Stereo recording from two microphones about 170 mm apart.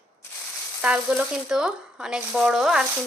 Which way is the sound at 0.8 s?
10° right (ahead or behind).